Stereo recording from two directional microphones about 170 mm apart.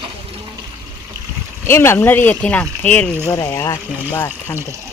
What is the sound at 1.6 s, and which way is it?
Speech, 15° left (ahead or behind).